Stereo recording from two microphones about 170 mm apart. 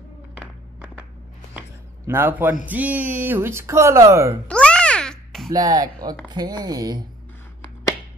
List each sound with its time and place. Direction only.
2.0 s speech: 15° right (ahead or behind)
4.5 s babbling: 5° left (ahead or behind)
5.5 s speech: 20° right (ahead or behind)